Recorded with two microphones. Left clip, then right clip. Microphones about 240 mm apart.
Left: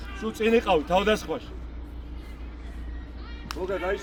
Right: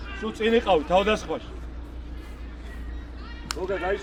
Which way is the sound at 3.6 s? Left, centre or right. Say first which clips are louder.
Right 1 dB; left.